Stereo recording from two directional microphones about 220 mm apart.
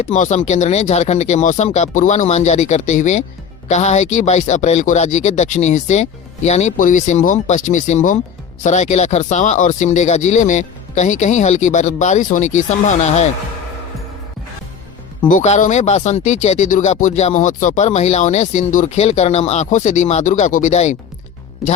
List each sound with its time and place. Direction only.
0.1 s speech: 35° left (ahead or behind)
15.3 s speech: 35° left (ahead or behind)
21.6 s speech: centre (ahead or behind)